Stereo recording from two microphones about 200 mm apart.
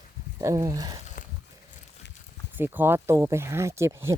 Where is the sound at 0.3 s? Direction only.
15° right (ahead or behind).